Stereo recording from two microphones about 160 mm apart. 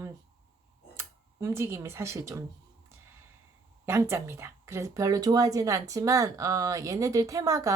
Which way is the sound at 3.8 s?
15° right (ahead or behind).